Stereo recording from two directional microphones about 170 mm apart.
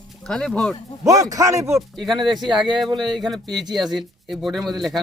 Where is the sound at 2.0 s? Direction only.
Centre (ahead or behind).